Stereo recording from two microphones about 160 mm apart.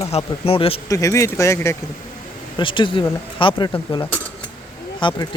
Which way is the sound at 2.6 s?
30° left (ahead or behind).